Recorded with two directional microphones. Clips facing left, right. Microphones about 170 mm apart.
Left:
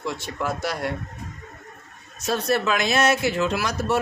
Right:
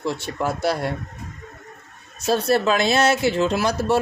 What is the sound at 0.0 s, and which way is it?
Speech, 30° right (ahead or behind).